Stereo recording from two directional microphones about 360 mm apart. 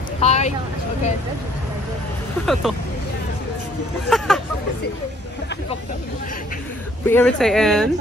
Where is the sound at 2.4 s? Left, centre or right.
Centre.